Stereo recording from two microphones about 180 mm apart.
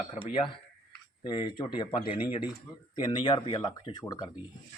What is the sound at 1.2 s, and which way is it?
Speech, 25° left (ahead or behind).